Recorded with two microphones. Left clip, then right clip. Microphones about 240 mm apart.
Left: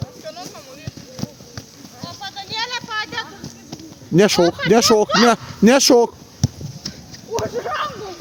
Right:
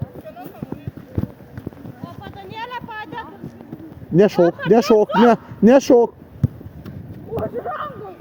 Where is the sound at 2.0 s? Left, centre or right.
Centre.